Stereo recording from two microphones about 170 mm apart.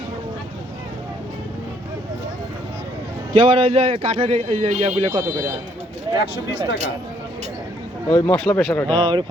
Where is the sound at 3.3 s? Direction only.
30° right (ahead or behind).